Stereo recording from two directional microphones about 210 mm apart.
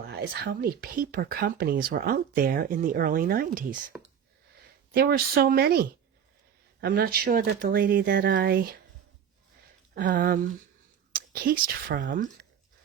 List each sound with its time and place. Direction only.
0.1 s speech: 50° right (ahead or behind)
4.9 s speech: 45° right (ahead or behind)
6.8 s speech: 50° right (ahead or behind)
9.9 s speech: 40° right (ahead or behind)